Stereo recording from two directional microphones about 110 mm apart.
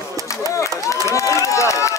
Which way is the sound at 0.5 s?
25° left (ahead or behind).